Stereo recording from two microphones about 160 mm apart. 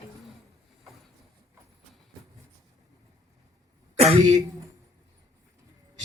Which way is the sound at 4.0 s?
40° right (ahead or behind).